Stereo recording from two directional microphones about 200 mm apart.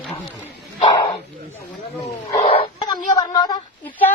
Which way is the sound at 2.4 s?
30° left (ahead or behind).